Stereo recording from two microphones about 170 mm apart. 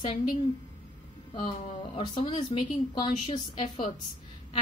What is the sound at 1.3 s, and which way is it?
Speech, 35° left (ahead or behind).